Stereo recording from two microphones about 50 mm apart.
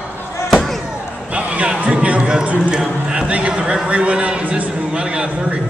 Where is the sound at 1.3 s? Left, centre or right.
Right.